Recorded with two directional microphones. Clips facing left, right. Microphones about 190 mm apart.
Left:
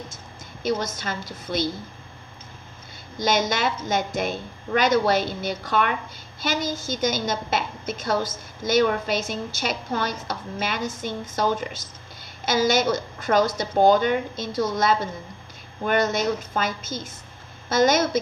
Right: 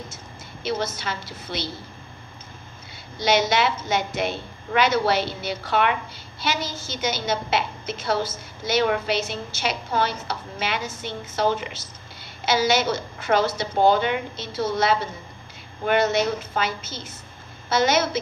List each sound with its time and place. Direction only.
0.6 s a woman's voice: 45° left (ahead or behind)
3.2 s a woman's voice: 45° left (ahead or behind)